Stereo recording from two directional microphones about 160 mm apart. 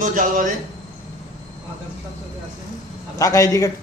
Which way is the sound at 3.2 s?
20° left (ahead or behind).